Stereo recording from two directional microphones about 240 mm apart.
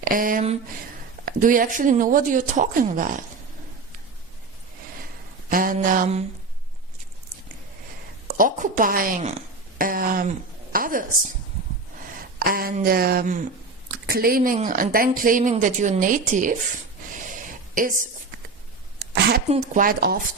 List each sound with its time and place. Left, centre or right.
0.0 s speech: right
5.5 s speech: right
8.4 s speech: right
12.5 s speech: right
17.2 s a sound: right
19.5 s speech: right